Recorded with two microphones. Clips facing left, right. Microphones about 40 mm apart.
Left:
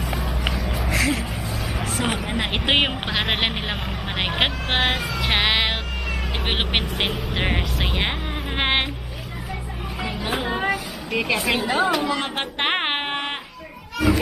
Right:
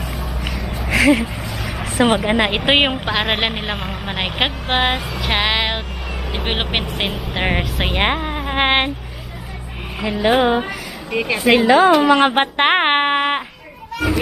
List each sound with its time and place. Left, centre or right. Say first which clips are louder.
0.6 s a sound: even; centre
0.9 s speech: right 10 dB; centre
2.0 s speech: right 11 dB; right
2.5 s speech: right 5 dB; right
3.1 s speech: right 4 dB; centre
5.2 s music: right 2 dB; centre
6.3 s speech: right 3 dB; centre
8.0 s speech: right 7 dB; right
10.0 s speech: right 11 dB; right
11.1 s speech: right 2 dB; centre
11.4 s a woman's voice: right 14 dB; right
12.4 s speech: right 8 dB; right